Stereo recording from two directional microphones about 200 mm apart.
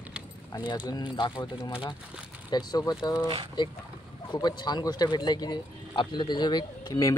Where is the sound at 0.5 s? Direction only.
20° left (ahead or behind).